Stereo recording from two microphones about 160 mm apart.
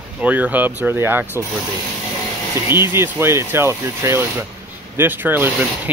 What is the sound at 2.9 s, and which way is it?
Speech, 15° right (ahead or behind).